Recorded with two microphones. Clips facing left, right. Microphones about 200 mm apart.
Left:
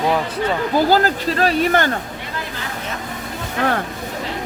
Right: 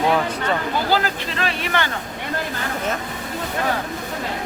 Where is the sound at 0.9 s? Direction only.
40° left (ahead or behind).